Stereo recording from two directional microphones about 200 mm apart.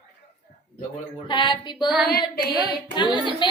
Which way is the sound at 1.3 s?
25° left (ahead or behind).